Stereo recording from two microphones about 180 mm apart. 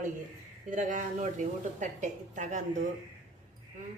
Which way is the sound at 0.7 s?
45° right (ahead or behind).